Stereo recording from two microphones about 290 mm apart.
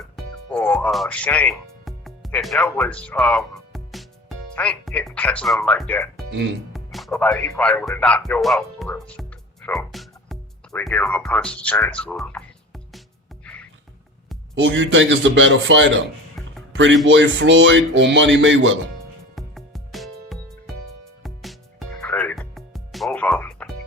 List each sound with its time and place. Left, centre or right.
0.2 s music: centre
6.3 s speech: right
6.7 s speech: centre
13.4 s music: centre
14.5 s speech: right
19.4 s music: centre